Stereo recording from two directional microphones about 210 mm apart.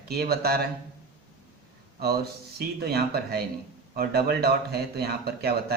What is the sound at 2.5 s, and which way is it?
Speech, 50° right (ahead or behind).